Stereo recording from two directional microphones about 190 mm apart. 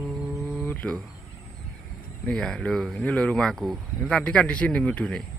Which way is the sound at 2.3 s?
5° left (ahead or behind).